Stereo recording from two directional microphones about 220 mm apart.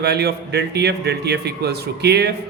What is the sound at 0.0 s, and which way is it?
A man's voice, 50° right (ahead or behind).